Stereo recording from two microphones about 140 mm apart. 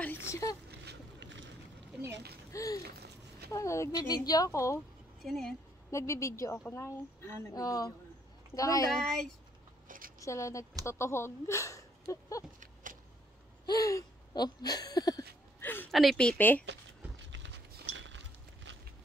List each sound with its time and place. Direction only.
0.0 s a sound: 15° left (ahead or behind)
2.5 s a woman's voice: 25° left (ahead or behind)
5.2 s speech: centre (ahead or behind)
5.9 s a woman's voice: 20° left (ahead or behind)
9.8 s a sound: 85° right
10.2 s a woman's voice: 20° left (ahead or behind)
13.7 s speech: 25° left (ahead or behind)
15.6 s a sound: 15° left (ahead or behind)
15.9 s a woman's voice: centre (ahead or behind)